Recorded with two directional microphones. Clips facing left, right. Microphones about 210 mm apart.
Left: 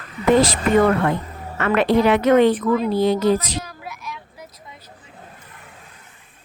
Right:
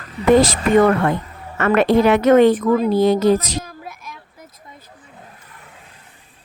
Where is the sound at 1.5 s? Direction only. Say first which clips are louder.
Right 3 dB; 45° right (ahead or behind).